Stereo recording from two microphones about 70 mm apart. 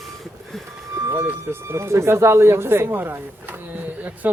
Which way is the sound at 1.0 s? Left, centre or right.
Right.